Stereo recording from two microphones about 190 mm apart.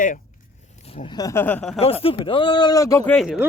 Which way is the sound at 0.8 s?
30° left (ahead or behind).